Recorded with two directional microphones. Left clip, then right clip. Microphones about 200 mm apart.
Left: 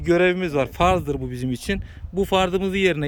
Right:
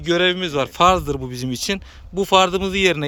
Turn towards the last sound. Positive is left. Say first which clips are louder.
# right 3 dB
turn(degrees=15)  # may be behind; listen again after turning